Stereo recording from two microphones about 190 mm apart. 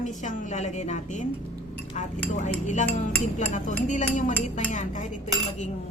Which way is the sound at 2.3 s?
40° left (ahead or behind).